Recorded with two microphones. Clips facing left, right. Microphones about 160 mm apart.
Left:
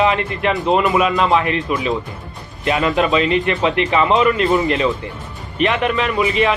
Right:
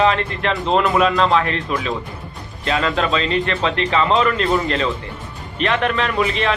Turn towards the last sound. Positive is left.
turn(degrees=10)  # may be behind; listen again after turning